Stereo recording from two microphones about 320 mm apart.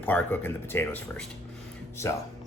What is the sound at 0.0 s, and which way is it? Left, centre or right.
Speech, centre.